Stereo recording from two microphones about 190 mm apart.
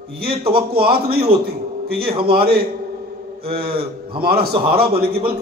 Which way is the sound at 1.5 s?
55° right (ahead or behind).